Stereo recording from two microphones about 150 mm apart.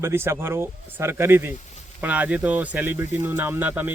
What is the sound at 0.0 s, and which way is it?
Speech, 15° right (ahead or behind).